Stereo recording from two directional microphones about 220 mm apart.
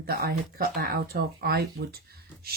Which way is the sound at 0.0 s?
45° right (ahead or behind).